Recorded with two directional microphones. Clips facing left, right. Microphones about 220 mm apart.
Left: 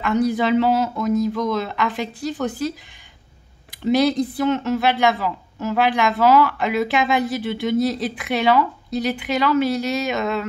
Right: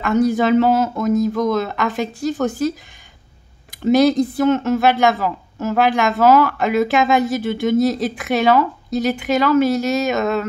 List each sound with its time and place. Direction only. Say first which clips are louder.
0.0 s speech: right 3 dB; 45° right (ahead or behind)
3.8 s speech: right 4 dB; 45° right (ahead or behind)